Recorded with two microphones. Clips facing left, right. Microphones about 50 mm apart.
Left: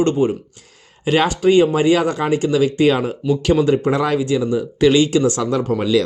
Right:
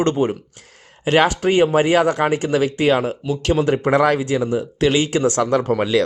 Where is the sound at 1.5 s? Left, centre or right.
Right.